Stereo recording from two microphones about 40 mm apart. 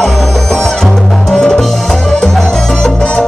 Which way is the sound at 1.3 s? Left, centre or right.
Centre.